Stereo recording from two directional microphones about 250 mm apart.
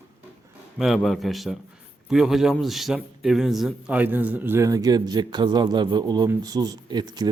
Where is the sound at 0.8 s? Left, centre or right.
Centre.